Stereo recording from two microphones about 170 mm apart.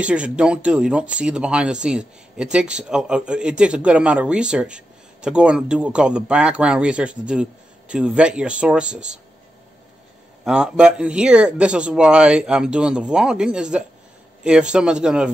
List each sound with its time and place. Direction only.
0.0 s speech: 5° right (ahead or behind)
10.4 s speech: 5° right (ahead or behind)